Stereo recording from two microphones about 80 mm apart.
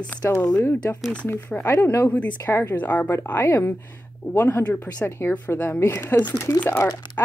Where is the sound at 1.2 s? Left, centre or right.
Left.